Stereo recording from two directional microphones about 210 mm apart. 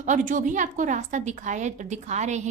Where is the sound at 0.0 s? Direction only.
35° right (ahead or behind).